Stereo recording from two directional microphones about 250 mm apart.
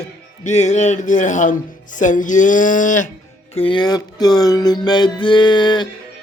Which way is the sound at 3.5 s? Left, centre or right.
Centre.